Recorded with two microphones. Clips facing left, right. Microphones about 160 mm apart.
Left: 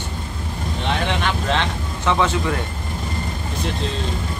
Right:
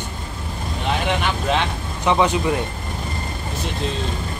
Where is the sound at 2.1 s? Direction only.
15° right (ahead or behind).